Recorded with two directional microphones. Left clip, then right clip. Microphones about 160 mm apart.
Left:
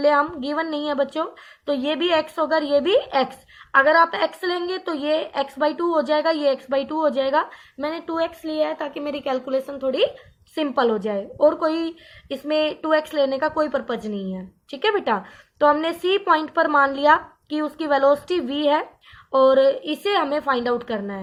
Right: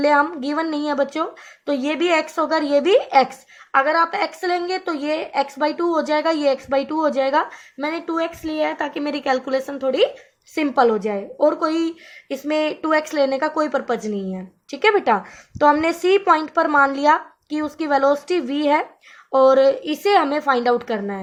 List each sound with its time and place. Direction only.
0.0 s speech: 35° right (ahead or behind)